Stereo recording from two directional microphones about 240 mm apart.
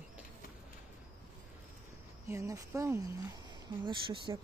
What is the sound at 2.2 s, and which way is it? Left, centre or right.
Speech, centre.